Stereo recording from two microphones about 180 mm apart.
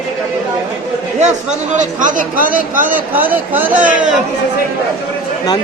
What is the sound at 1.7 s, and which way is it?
Speech, 45° right (ahead or behind).